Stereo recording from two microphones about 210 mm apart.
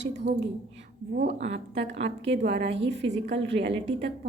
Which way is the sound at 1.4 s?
60° right (ahead or behind).